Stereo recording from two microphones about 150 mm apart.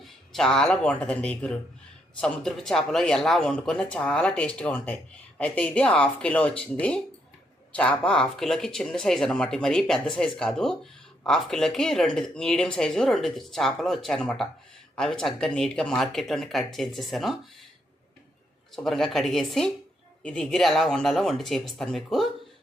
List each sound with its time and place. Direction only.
0.0 s speech: 5° left (ahead or behind)
18.7 s speech: centre (ahead or behind)